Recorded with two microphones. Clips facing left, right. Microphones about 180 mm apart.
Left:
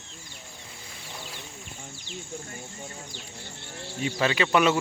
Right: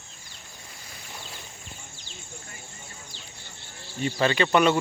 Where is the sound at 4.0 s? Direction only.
5° left (ahead or behind).